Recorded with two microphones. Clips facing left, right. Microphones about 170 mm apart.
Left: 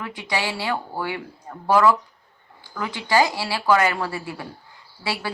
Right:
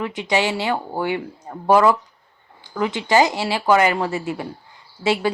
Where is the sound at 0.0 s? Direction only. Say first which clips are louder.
Right 6 dB; 20° right (ahead or behind).